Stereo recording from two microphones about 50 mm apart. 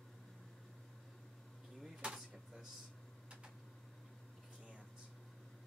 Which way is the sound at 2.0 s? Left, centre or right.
Centre.